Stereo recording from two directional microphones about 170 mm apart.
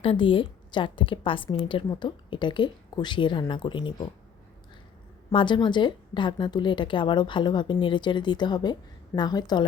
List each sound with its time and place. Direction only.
0.0 s a woman's voice: 30° left (ahead or behind)
5.3 s a woman's voice: 30° left (ahead or behind)